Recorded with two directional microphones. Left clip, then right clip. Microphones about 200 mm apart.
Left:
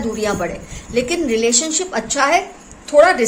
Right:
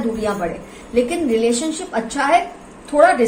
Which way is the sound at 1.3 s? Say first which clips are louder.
Left 1 dB; 60° left (ahead or behind).